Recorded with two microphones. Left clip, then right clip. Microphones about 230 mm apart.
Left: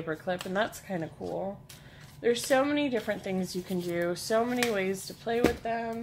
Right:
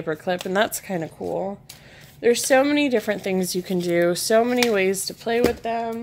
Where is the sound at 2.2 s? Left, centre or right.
Right.